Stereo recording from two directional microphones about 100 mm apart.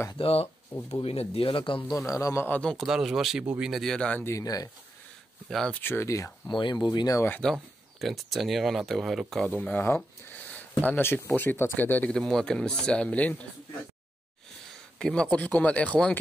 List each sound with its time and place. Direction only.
0.2 s speech: 75° left (ahead or behind)
1.3 s speech: 65° left (ahead or behind)
2.0 s speech: 35° left (ahead or behind)
2.4 s speech: 10° left (ahead or behind)
2.9 s speech: 5° right (ahead or behind)
3.7 s speech: 5° left (ahead or behind)
4.2 s speech: 30° left (ahead or behind)
5.5 s speech: centre (ahead or behind)
5.8 s speech: 25° left (ahead or behind)
6.5 s speech: 50° left (ahead or behind)
7.1 s speech: 25° left (ahead or behind)
7.3 s speech: 5° left (ahead or behind); by 12.1 s 20° left (ahead or behind)
12.1 s speech: 5° left (ahead or behind)
15.0 s speech: 5° left (ahead or behind)